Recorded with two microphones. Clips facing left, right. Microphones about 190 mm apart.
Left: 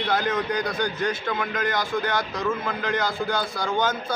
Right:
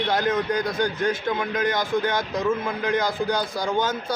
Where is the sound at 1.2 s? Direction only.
20° right (ahead or behind).